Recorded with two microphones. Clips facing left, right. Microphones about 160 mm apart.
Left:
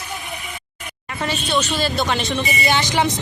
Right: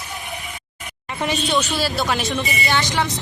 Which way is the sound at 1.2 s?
15° right (ahead or behind).